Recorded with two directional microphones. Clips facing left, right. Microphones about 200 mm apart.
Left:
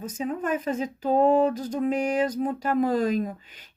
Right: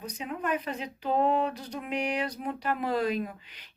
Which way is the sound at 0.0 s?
45° left (ahead or behind).